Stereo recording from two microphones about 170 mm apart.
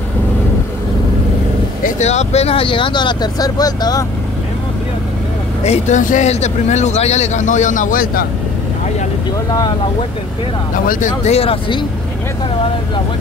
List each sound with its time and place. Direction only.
1.8 s speech: 45° left (ahead or behind); by 4.0 s 20° left (ahead or behind)
5.6 s speech: 40° left (ahead or behind); by 8.3 s 60° left (ahead or behind)
10.9 s speech: 50° left (ahead or behind)